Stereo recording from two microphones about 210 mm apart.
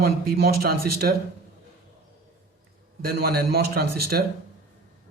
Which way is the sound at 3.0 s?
45° right (ahead or behind).